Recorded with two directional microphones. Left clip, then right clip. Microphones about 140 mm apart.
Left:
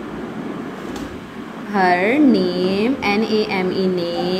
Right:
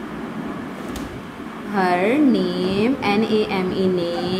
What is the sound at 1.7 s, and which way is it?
A woman's voice, 20° left (ahead or behind).